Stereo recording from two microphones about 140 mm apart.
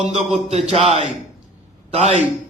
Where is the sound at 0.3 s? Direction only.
50° right (ahead or behind).